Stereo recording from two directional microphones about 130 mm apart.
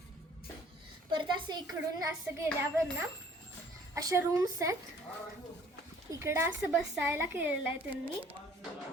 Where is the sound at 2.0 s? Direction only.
25° right (ahead or behind).